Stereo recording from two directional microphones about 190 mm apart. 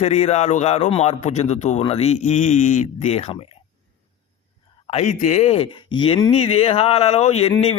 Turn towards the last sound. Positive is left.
turn(degrees=35)  # may be behind; listen again after turning